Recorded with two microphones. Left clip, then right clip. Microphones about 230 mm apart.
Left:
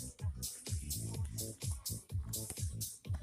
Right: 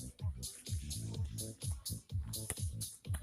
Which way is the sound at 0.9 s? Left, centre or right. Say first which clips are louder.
Left 1 dB; left.